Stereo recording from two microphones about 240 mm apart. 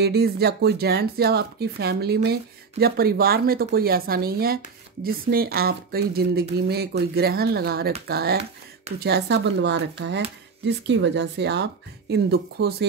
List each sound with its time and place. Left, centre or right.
0.0 s speech: right